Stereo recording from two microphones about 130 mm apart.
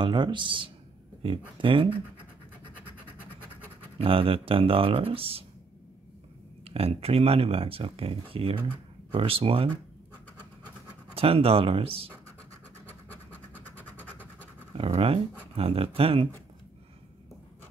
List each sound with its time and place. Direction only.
0.0 s speech: 40° right (ahead or behind)
2.7 s vehicle: 10° left (ahead or behind)
4.0 s speech: 45° right (ahead or behind)
6.7 s speech: 50° right (ahead or behind)
11.1 s speech: 50° right (ahead or behind)
12.8 s scratch: 15° left (ahead or behind)
14.7 s speech: 45° right (ahead or behind)